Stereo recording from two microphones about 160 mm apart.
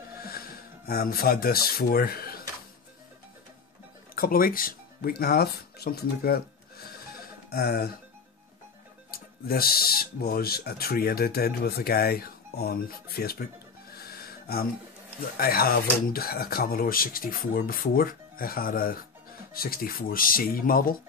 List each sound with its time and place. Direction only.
0.2 s speech: 70° left (ahead or behind)
4.1 s speech: 65° left (ahead or behind)
9.5 s speech: 70° left (ahead or behind)